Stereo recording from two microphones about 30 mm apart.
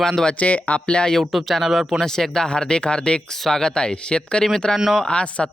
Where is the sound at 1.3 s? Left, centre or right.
Centre.